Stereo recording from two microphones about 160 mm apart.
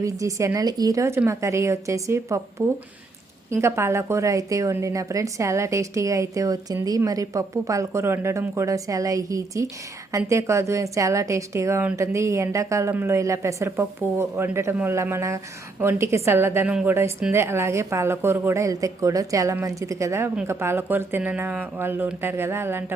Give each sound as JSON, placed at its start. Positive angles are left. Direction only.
{"t": 0.0, "sound": "a woman's voice", "side_deg": -20}